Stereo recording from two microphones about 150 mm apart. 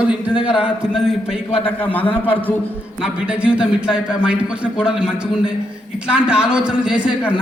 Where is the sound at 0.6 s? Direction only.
5° right (ahead or behind).